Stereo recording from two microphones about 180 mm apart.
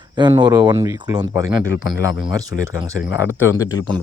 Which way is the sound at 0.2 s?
25° right (ahead or behind).